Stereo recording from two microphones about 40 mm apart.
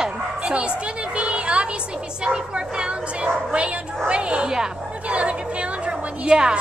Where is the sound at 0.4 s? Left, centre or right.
Right.